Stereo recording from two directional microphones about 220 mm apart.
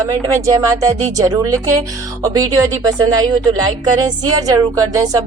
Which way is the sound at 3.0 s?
15° right (ahead or behind).